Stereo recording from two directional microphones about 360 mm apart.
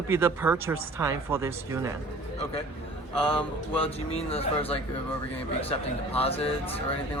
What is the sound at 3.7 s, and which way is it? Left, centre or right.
Speech, centre.